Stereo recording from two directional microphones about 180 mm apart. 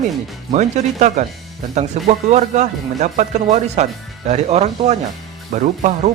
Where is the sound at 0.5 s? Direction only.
40° right (ahead or behind).